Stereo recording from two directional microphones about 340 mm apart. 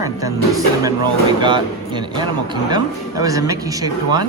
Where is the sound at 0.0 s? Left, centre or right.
Centre.